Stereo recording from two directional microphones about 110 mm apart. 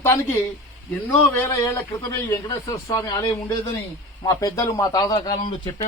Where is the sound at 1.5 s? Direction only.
30° left (ahead or behind).